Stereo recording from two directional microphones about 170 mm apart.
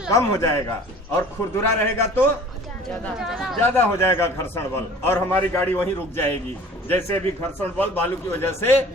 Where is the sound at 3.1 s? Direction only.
5° right (ahead or behind).